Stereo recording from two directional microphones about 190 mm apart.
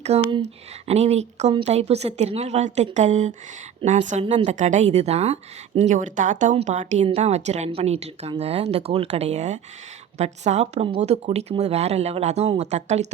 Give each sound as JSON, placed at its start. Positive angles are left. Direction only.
{"t": 0.1, "sound": "a woman's voice", "side_deg": -35}